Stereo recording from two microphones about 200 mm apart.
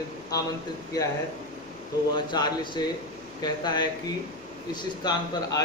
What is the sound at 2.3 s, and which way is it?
A man's voice, 20° left (ahead or behind).